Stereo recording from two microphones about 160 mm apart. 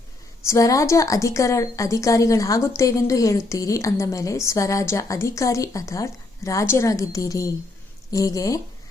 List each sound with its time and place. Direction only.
0.4 s a woman's voice: 20° left (ahead or behind)